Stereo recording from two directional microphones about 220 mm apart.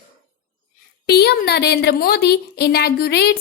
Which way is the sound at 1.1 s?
45° left (ahead or behind).